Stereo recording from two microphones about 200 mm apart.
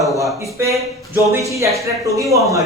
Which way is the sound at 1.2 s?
15° right (ahead or behind).